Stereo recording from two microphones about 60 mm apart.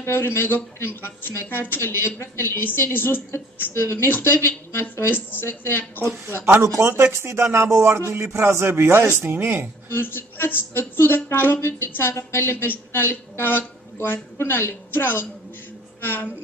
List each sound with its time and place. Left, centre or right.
0.0 s a woman's voice: left
1.8 s a woman's voice: left
5.1 s a woman's voice: left
6.3 s a man's voice: right
9.8 s a woman's voice: left